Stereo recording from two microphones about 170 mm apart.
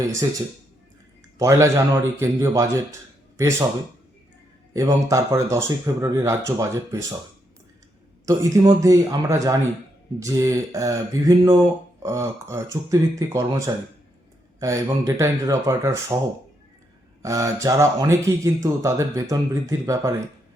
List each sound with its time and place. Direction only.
1.4 s speech: 15° right (ahead or behind)
4.7 s speech: 20° right (ahead or behind)
8.2 s speech: 20° right (ahead or behind)
17.2 s speech: 20° right (ahead or behind)